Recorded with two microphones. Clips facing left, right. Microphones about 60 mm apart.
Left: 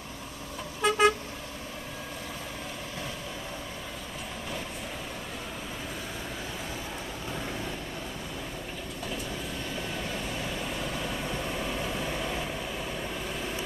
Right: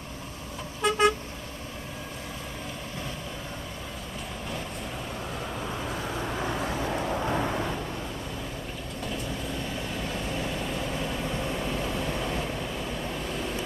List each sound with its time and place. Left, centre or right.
0.8 s vehicle: centre
6.4 s vehicle: right
7.3 s vehicle: right
10.1 s vehicle: centre